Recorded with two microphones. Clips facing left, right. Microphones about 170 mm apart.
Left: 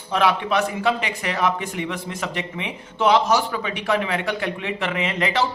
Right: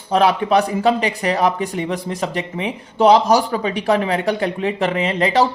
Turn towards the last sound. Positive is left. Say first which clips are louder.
# right 6 dB
turn(degrees=-35)  # may be behind; listen again after turning